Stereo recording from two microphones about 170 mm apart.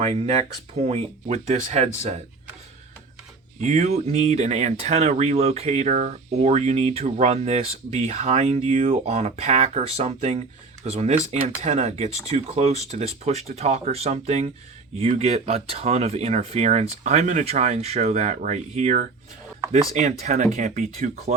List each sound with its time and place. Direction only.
0.0 s speech: 35° right (ahead or behind)
3.6 s speech: 40° right (ahead or behind)